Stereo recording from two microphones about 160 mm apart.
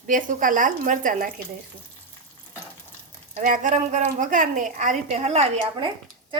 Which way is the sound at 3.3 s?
50° right (ahead or behind).